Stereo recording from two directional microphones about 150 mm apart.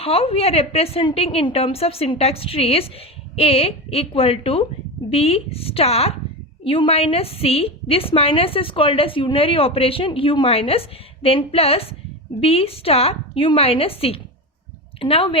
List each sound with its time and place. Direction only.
0.0 s a woman's voice: 40° left (ahead or behind)